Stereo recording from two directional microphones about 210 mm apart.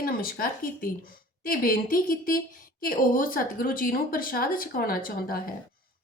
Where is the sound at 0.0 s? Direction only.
45° left (ahead or behind).